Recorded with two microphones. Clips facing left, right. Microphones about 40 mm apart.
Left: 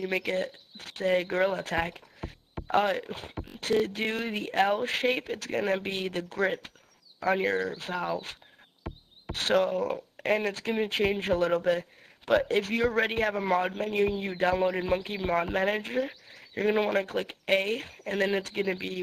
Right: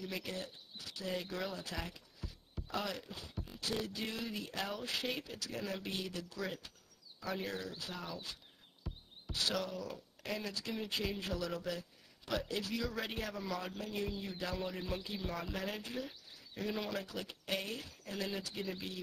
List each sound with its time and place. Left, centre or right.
0.0 s speech: left